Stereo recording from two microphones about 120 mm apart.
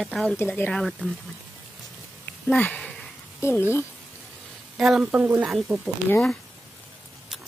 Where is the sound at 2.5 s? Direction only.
10° left (ahead or behind).